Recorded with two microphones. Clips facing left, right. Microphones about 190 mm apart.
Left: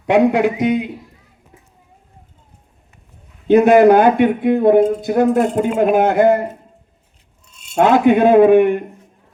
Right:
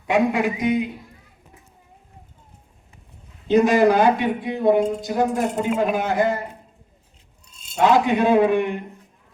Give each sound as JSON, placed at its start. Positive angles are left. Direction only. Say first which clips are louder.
{"t": 0.0, "sound": "speech", "louder": "left 6 dB", "side_deg": 65}
{"t": 3.4, "sound": "speech", "louder": "left 6 dB", "side_deg": 60}
{"t": 7.8, "sound": "speech", "louder": "left 6 dB", "side_deg": 55}